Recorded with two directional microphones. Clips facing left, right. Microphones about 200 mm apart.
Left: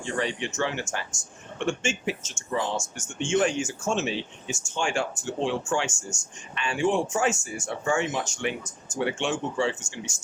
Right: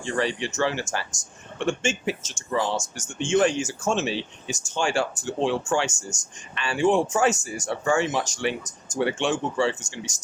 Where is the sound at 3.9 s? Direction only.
35° right (ahead or behind).